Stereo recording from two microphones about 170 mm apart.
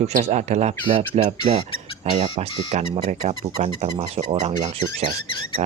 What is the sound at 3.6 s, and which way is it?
Speech, 35° right (ahead or behind).